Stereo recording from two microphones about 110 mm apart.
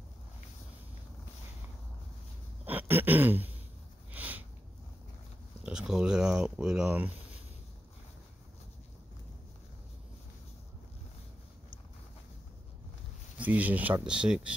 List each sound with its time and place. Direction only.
2.6 s a sound: 15° right (ahead or behind)
5.6 s speech: 10° right (ahead or behind)
13.4 s speech: 15° right (ahead or behind)